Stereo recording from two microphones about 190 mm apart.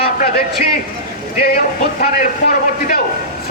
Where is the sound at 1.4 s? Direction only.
50° left (ahead or behind).